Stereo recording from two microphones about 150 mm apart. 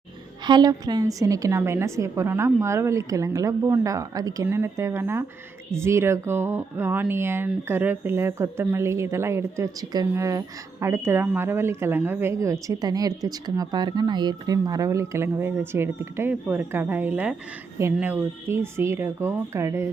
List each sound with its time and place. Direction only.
0.4 s a woman's voice: 30° right (ahead or behind)